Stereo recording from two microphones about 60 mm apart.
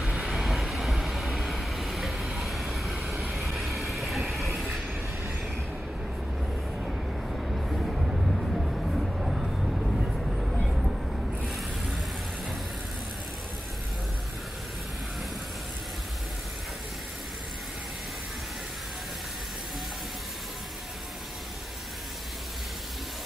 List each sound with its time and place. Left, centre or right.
0.0 s vehicle: centre
0.3 s vehicle: centre
3.2 s train: centre
6.8 s vehicle: centre
10.7 s a sound: centre